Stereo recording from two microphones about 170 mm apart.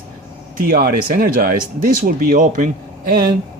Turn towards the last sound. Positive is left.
turn(degrees=-55)  # may be behind; listen again after turning